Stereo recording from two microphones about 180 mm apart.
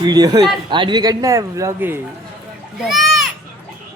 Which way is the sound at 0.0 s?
25° right (ahead or behind).